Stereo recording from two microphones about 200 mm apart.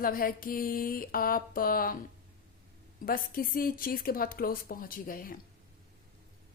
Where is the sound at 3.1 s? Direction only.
45° left (ahead or behind).